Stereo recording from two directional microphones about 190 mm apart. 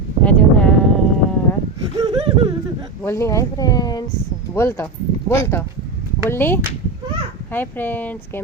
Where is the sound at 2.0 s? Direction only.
25° right (ahead or behind).